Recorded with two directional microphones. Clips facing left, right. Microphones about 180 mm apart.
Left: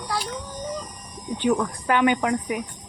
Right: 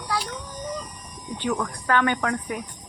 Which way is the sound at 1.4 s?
15° left (ahead or behind).